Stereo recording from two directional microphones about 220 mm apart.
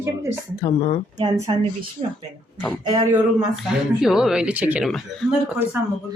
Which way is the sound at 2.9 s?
20° right (ahead or behind).